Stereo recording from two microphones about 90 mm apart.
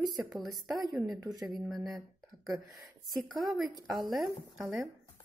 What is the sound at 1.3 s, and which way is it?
Speech, 45° right (ahead or behind).